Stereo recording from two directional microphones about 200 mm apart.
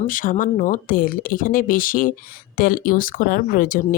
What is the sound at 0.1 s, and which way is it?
Speech, 40° left (ahead or behind).